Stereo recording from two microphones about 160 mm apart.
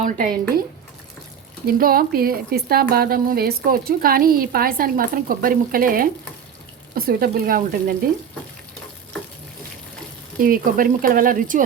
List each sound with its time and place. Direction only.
0.0 s speech: 55° right (ahead or behind)
1.6 s speech: 65° right (ahead or behind)
10.4 s speech: 60° right (ahead or behind)